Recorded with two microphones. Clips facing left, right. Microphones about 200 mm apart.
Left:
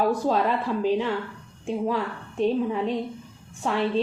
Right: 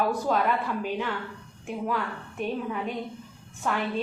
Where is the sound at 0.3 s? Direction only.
30° left (ahead or behind).